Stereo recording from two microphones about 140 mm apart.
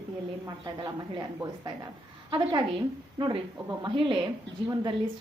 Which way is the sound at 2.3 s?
35° right (ahead or behind).